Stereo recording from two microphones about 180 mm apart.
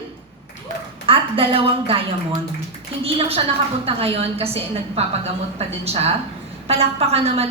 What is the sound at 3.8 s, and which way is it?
A woman's voice, 35° right (ahead or behind).